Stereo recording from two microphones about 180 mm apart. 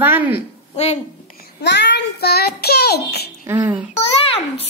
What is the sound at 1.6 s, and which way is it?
Child singing, 70° left (ahead or behind).